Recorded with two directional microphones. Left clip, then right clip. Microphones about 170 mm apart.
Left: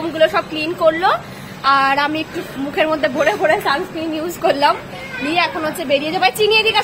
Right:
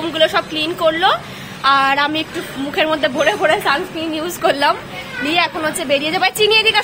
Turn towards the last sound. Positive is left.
turn(degrees=0)  # may be behind; listen again after turning